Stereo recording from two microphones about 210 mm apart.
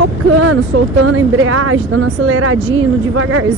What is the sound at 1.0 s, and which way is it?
Speech, 85° right.